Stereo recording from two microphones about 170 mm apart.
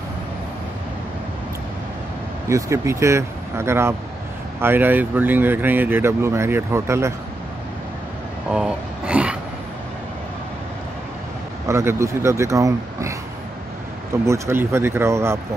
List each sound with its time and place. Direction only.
2.4 s speech: 15° right (ahead or behind)
8.5 s a sound: 5° right (ahead or behind)
11.6 s speech: 15° right (ahead or behind)
14.2 s speech: 15° right (ahead or behind)